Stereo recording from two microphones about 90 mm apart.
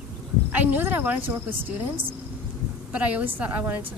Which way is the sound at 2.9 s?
15° right (ahead or behind).